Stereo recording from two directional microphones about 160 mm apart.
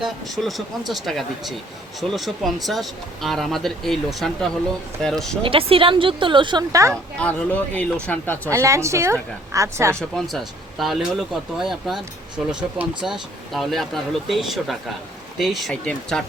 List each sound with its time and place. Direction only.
0.0 s speech: centre (ahead or behind)
5.4 s speech: 35° right (ahead or behind)
7.2 s speech: 10° left (ahead or behind)
8.4 s a woman's voice: 20° right (ahead or behind)
9.9 s speech: 5° left (ahead or behind)